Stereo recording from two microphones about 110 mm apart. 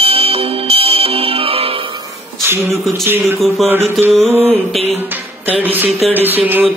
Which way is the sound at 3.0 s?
20° right (ahead or behind).